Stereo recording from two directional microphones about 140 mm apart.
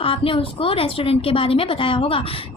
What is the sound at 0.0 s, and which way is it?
A woman's voice, 40° left (ahead or behind).